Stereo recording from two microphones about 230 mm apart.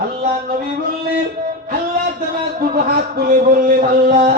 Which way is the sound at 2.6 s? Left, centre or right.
Right.